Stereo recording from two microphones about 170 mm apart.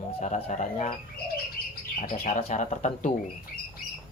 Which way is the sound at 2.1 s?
40° left (ahead or behind).